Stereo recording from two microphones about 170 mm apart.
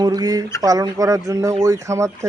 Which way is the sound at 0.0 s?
20° right (ahead or behind).